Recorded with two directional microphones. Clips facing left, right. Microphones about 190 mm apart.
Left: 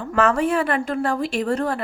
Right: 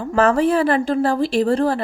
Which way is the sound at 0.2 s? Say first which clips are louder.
Right 4 dB; 35° right (ahead or behind).